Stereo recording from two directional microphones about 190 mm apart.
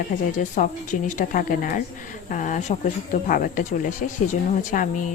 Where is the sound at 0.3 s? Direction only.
40° left (ahead or behind).